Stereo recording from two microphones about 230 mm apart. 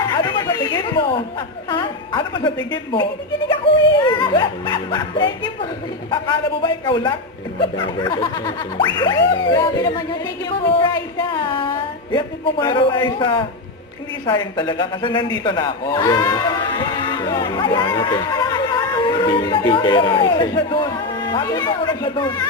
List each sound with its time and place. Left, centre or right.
0.1 s chatter: centre
1.7 s a woman's voice: left